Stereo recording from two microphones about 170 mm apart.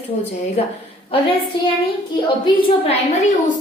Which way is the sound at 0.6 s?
40° left (ahead or behind).